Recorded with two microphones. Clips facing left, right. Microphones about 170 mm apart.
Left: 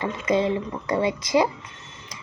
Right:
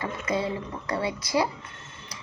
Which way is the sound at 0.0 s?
20° left (ahead or behind).